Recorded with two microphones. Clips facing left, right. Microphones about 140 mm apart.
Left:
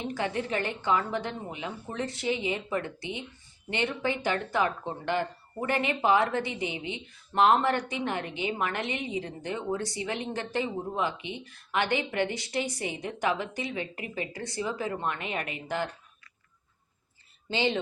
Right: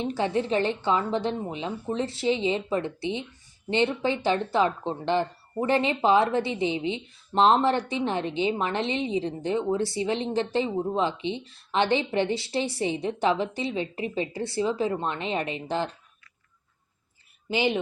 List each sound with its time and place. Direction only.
0.2 s speech: 20° right (ahead or behind)
17.5 s speech: 15° right (ahead or behind)